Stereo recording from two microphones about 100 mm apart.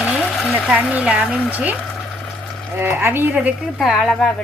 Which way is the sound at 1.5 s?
15° right (ahead or behind).